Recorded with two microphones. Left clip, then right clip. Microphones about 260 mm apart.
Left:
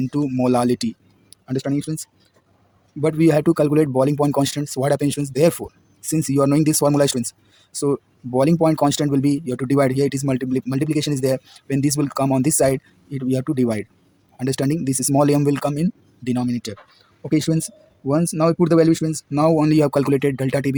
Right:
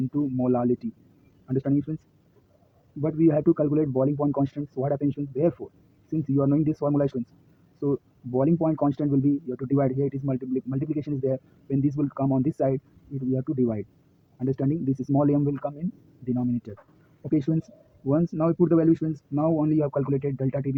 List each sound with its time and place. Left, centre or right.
0.1 s speech: left
3.0 s speech: left
19.3 s speech: left